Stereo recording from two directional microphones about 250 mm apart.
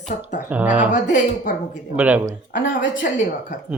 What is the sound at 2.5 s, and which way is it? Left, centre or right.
Speech, left.